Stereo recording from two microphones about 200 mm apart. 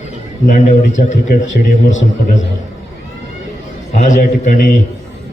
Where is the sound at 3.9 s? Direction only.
35° left (ahead or behind).